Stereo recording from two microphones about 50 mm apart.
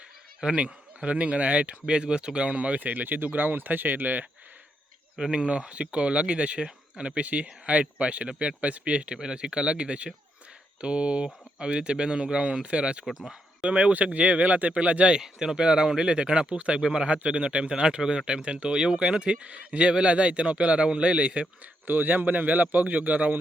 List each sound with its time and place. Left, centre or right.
0.4 s speech: right
5.1 s speech: centre
13.1 s speech: centre
13.7 s speech: right
15.2 s speech: centre; by 21.4 s right
21.8 s a man's voice: right